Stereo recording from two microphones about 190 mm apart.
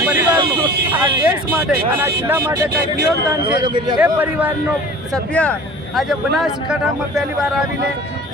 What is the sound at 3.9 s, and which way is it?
Speech, 10° right (ahead or behind).